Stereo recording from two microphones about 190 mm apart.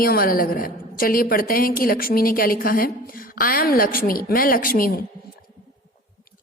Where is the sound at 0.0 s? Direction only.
50° left (ahead or behind).